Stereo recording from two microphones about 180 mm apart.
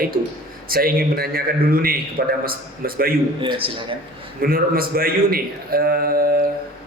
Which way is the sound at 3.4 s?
30° right (ahead or behind).